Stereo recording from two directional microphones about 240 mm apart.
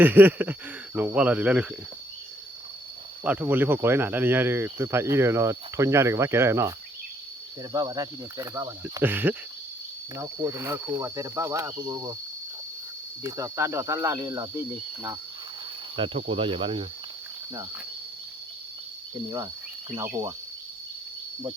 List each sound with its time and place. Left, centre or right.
0.0 s speech: centre
3.5 s speech: centre
13.2 s speech: centre
16.0 s speech: right